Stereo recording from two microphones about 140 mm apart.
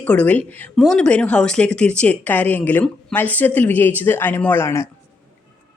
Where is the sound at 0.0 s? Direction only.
10° left (ahead or behind).